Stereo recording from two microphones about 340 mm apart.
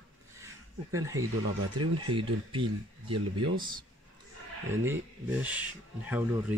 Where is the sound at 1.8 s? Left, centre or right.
Right.